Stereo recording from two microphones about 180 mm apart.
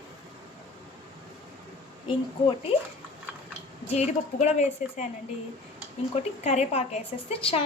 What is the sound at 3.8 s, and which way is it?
A woman's voice, 35° left (ahead or behind).